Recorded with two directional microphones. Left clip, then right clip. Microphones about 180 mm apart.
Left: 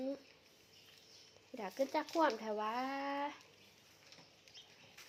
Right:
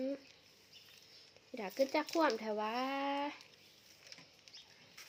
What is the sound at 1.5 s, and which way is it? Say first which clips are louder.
Speech: right 3 dB; 25° right (ahead or behind).